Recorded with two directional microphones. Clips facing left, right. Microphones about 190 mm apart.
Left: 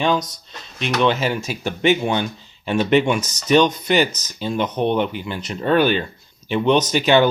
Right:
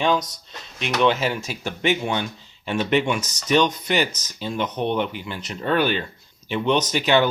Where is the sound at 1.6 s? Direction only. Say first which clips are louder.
Left 5 dB; 25° left (ahead or behind).